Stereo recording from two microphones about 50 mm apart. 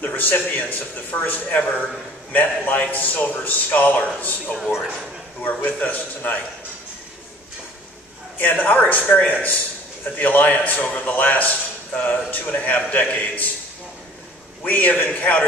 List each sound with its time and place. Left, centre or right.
0.0 s a man's voice: left
1.6 s a man's voice: left
2.3 s a man's voice: left
4.6 s a man's voice: centre
5.6 s a man's voice: left
8.4 s a man's voice: left
14.6 s a man's voice: left